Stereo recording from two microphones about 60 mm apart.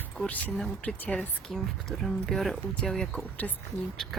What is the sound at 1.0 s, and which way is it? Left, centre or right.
Speech, left.